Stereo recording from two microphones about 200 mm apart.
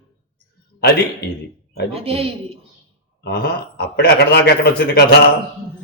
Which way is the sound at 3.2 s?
50° left (ahead or behind).